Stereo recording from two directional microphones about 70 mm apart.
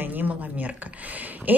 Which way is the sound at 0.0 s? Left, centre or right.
Right.